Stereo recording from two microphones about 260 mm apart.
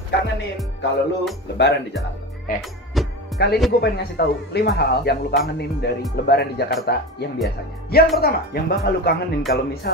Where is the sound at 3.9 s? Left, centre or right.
Left.